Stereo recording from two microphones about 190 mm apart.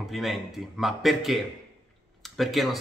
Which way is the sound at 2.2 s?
Centre (ahead or behind).